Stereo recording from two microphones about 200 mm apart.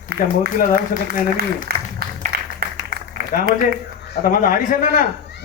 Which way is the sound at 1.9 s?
45° right (ahead or behind).